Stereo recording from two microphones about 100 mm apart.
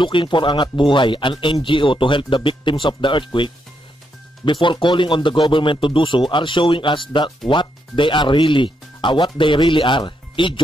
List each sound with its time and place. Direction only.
0.0 s speech: 55° left (ahead or behind)
4.5 s speech: 55° left (ahead or behind)